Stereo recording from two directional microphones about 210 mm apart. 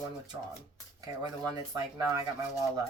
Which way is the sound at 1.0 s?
20° right (ahead or behind).